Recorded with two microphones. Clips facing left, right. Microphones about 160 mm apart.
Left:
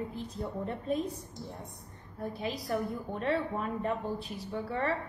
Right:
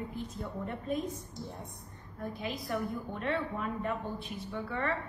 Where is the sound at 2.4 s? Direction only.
35° left (ahead or behind).